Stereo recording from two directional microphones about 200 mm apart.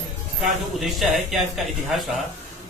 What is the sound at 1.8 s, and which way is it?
Speech, centre (ahead or behind).